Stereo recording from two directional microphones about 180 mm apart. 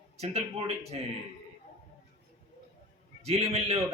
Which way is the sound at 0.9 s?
35° right (ahead or behind).